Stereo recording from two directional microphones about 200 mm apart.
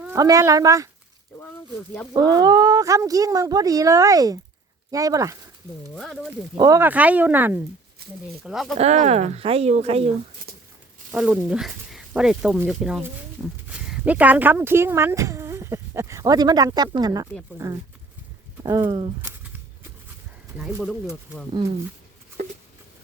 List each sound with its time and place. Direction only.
0.0 s speech: 15° right (ahead or behind)
2.1 s speech: 20° right (ahead or behind)
6.0 s speech: centre (ahead or behind)
6.6 s speech: 15° right (ahead or behind)
8.8 s speech: 35° right (ahead or behind)
11.1 s speech: 5° right (ahead or behind)
18.6 s speech: 20° right (ahead or behind)
20.6 s speech: 5° right (ahead or behind)